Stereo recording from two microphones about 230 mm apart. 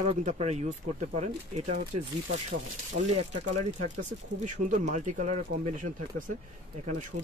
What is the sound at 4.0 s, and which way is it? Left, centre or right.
Speech, right.